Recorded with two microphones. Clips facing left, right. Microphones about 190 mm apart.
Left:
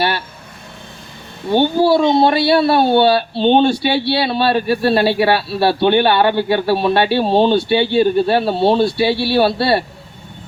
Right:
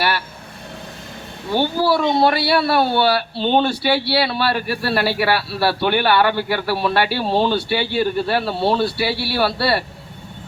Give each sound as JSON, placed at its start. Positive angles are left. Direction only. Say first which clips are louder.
{"t": 1.5, "sound": "a man's voice", "louder": "left 5 dB", "side_deg": 25}